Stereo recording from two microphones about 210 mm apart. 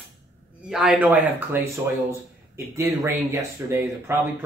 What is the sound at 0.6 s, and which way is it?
Speech, 5° right (ahead or behind).